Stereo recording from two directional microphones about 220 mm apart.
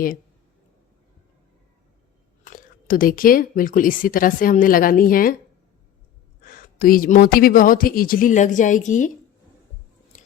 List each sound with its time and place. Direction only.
2.4 s speech: 40° left (ahead or behind)
6.4 s speech: 40° left (ahead or behind)
10.1 s biting: 35° left (ahead or behind)